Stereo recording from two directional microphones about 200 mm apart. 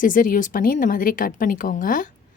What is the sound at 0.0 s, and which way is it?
A woman's voice, 40° left (ahead or behind).